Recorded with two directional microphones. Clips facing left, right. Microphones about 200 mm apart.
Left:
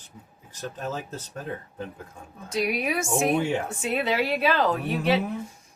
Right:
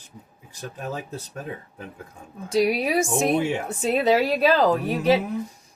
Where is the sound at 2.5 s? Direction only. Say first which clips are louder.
Right 5 dB; 35° right (ahead or behind).